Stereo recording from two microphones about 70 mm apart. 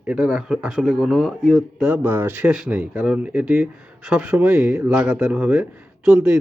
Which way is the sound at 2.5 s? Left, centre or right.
Centre.